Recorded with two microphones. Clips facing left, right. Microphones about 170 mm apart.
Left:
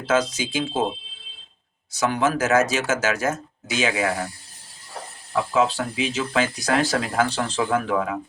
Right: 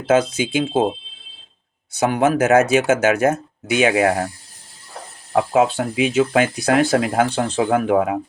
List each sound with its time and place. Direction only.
0.0 s speech: 55° right (ahead or behind)
1.9 s speech: 55° right (ahead or behind)
5.5 s speech: 55° right (ahead or behind)